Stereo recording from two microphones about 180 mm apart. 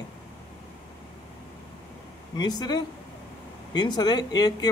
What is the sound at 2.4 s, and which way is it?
Speech, 25° left (ahead or behind).